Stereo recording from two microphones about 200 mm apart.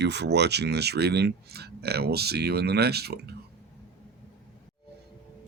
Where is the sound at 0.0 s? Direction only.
60° right (ahead or behind).